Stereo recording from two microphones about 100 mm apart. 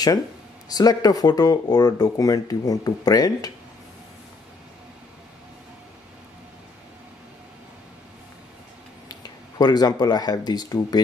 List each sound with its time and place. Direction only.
0.7 s speech: 40° left (ahead or behind)
9.1 s speech: 40° left (ahead or behind)